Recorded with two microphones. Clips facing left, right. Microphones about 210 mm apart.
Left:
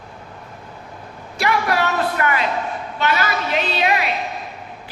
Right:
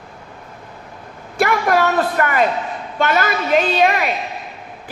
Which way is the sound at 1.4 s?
50° right (ahead or behind).